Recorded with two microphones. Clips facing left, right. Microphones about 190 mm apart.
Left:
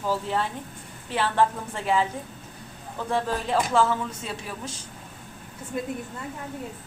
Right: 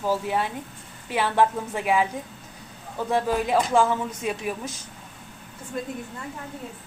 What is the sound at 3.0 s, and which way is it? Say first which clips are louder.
A woman's voice: right 3 dB; 10° right (ahead or behind).